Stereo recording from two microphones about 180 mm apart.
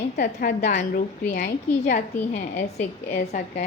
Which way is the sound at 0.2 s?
55° left (ahead or behind).